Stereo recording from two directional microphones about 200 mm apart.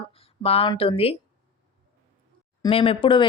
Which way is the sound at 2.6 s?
30° left (ahead or behind).